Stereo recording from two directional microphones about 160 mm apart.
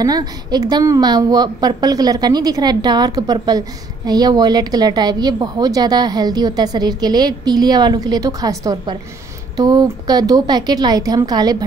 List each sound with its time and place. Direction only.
0.0 s a woman's voice: 25° right (ahead or behind)